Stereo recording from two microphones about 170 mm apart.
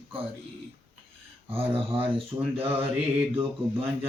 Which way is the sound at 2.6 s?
15° right (ahead or behind).